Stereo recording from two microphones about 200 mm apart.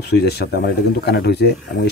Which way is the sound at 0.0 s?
55° left (ahead or behind).